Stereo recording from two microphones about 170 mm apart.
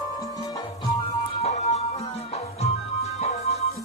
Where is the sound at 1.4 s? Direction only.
40° left (ahead or behind).